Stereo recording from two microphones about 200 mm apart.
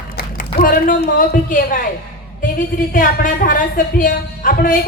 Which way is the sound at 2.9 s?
45° left (ahead or behind).